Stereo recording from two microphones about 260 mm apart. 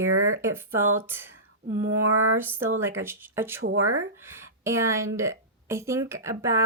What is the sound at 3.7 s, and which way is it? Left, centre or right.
Speech, right.